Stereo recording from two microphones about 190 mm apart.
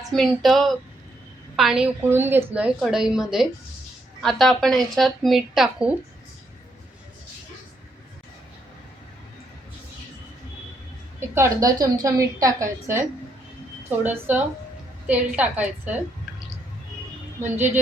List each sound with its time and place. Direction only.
0.1 s a woman's voice: centre (ahead or behind)
11.2 s a woman's voice: 15° right (ahead or behind)